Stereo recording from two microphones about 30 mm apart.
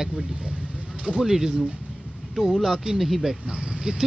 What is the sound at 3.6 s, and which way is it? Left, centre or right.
Speech, right.